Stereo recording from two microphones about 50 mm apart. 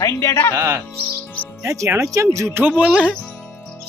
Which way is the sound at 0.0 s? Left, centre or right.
Left.